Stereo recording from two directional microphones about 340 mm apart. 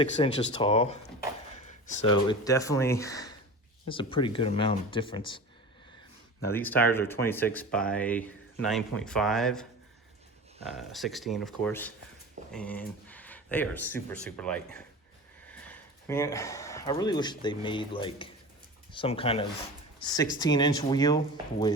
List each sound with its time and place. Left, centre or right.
0.0 s speech: centre
6.5 s speech: centre
10.8 s speech: centre